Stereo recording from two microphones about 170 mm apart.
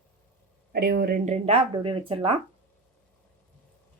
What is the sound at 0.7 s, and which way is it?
Speech, 65° right (ahead or behind).